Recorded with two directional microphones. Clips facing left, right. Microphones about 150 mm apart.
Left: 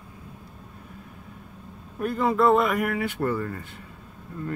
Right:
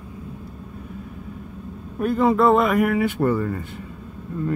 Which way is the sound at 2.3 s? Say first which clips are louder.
Right 1 dB; centre (ahead or behind).